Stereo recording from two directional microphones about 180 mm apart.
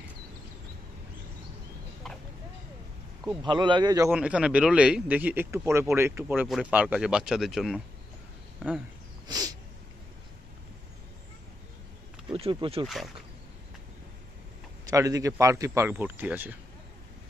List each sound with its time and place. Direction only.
2.0 s a sound: centre (ahead or behind)
3.4 s speech: 25° right (ahead or behind)
4.1 s speech: 5° right (ahead or behind)
9.3 s a sound: 20° right (ahead or behind)
12.3 s speech: 30° right (ahead or behind)
12.8 s speech: centre (ahead or behind)
14.9 s speech: 20° right (ahead or behind)